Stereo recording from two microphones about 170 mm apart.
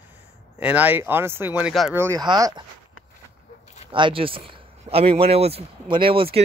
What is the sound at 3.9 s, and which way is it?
Speech, 30° right (ahead or behind).